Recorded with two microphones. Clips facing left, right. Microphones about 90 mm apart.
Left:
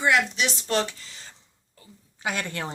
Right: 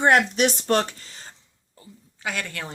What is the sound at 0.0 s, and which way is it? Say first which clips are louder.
Speech: right 4 dB; 50° right (ahead or behind).